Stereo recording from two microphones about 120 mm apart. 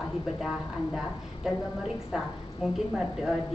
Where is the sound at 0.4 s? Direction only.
Centre (ahead or behind).